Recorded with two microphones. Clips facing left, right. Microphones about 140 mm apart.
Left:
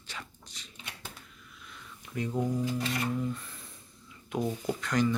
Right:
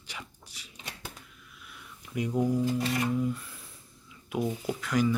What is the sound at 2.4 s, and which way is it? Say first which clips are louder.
Speech: right 4 dB; 10° right (ahead or behind).